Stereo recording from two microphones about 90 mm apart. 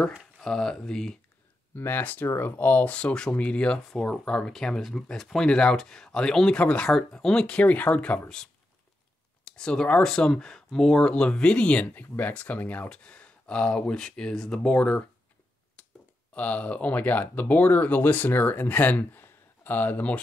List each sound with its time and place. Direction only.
0.4 s speech: 5° left (ahead or behind)
1.8 s speech: 20° left (ahead or behind)
16.3 s speech: 15° left (ahead or behind)